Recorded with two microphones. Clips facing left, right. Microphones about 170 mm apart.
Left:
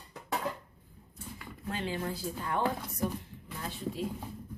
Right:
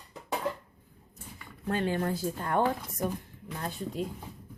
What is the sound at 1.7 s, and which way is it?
A woman's voice, 50° right (ahead or behind).